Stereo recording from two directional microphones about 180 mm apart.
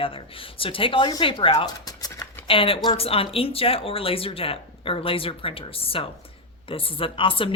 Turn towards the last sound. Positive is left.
turn(degrees=30)  # may be behind; listen again after turning